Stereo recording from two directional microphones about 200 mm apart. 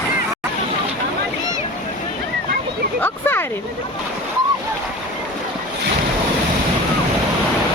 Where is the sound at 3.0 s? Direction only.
10° left (ahead or behind).